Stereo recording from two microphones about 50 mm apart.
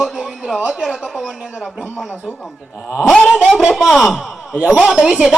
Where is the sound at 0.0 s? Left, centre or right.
Centre.